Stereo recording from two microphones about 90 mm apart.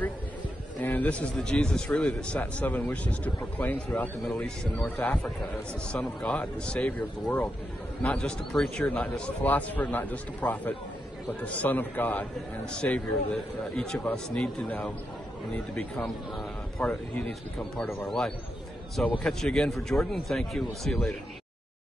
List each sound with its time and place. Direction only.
0.7 s a man's voice: 20° left (ahead or behind)
16.0 s a man's voice: 5° left (ahead or behind)